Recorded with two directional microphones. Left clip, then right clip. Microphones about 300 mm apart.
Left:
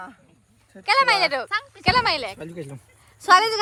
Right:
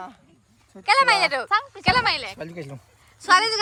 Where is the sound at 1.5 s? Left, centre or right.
Right.